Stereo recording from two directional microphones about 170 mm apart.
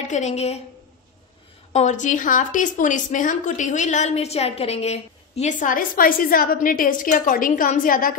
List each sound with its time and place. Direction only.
0.1 s a woman's voice: 40° left (ahead or behind)
1.7 s a woman's voice: 45° left (ahead or behind)